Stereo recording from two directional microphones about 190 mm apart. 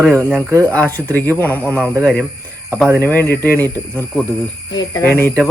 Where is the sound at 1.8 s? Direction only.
10° right (ahead or behind).